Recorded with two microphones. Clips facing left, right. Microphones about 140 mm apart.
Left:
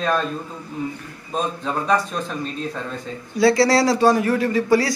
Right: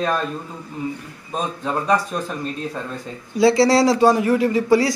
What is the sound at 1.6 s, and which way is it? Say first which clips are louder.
Speech: right 2 dB; 5° right (ahead or behind).